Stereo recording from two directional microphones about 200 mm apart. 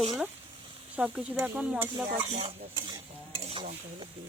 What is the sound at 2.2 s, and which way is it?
Stir, 35° right (ahead or behind).